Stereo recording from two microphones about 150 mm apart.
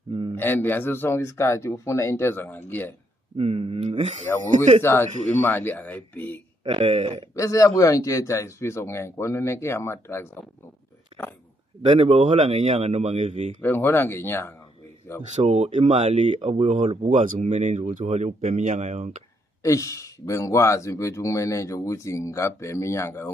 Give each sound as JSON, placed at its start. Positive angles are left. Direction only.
{"t": 0.1, "sound": "a sound", "side_deg": -35}
{"t": 0.4, "sound": "speech", "side_deg": 15}
{"t": 3.3, "sound": "speech", "side_deg": -40}
{"t": 4.8, "sound": "speech", "side_deg": 15}
{"t": 6.6, "sound": "speech", "side_deg": -40}
{"t": 7.3, "sound": "speech", "side_deg": 20}
{"t": 11.8, "sound": "speech", "side_deg": -45}
{"t": 13.6, "sound": "speech", "side_deg": 15}
{"t": 15.3, "sound": "speech", "side_deg": -45}
{"t": 19.6, "sound": "speech", "side_deg": 20}